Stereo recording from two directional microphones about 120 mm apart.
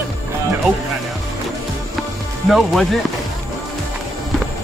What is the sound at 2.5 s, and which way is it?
Speech, centre (ahead or behind).